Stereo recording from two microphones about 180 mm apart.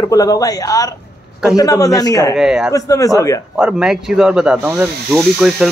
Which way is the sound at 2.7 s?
20° left (ahead or behind).